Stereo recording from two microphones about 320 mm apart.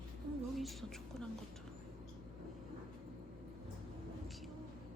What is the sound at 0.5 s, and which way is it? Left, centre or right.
Speech, centre.